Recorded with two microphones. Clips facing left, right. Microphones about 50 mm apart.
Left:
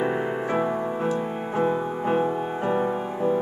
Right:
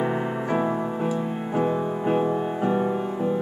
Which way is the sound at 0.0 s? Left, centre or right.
Centre.